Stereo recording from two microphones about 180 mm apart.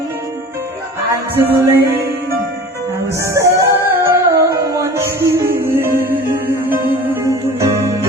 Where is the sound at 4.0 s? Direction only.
15° right (ahead or behind).